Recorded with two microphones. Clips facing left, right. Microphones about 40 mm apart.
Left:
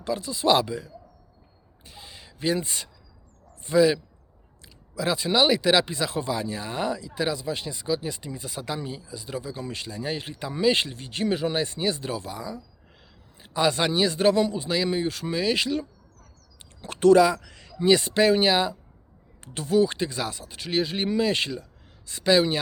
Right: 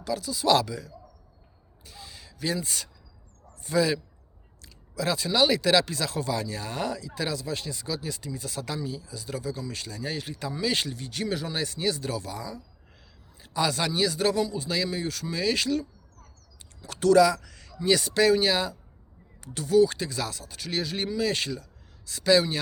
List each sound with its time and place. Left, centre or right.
0.0 s speech: left
1.8 s a sound: left
2.6 s speech: centre
8.8 s speech: left
9.0 s speech: left
16.8 s speech: left